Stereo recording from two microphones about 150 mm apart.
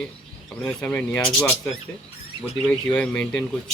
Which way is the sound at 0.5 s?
5° left (ahead or behind).